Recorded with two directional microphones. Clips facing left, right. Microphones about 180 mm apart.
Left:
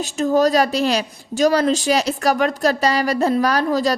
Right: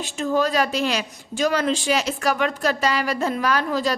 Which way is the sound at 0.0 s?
40° left (ahead or behind).